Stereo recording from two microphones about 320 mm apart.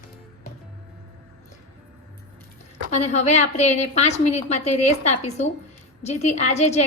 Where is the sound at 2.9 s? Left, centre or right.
Left.